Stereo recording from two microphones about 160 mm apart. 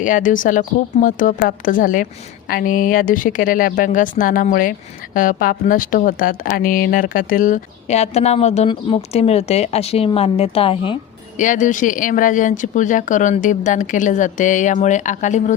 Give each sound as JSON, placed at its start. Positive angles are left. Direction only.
{"t": 0.0, "sound": "a woman's voice", "side_deg": 55}
{"t": 11.3, "sound": "speech", "side_deg": 55}